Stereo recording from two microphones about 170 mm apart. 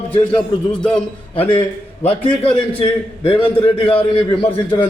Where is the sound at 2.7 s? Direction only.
30° left (ahead or behind).